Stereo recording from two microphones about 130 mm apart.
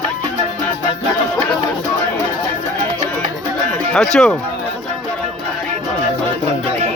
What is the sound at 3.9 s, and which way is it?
Speech, 5° left (ahead or behind).